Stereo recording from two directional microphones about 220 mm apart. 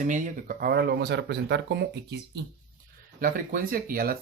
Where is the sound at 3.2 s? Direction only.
40° right (ahead or behind).